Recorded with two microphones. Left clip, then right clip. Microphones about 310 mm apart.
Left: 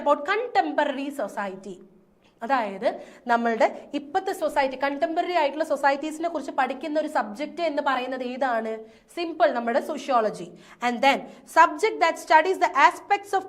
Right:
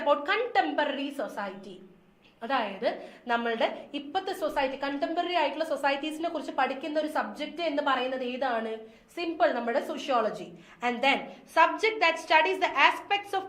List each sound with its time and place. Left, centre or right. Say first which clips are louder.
0.0 s a woman's voice: left 3 dB; left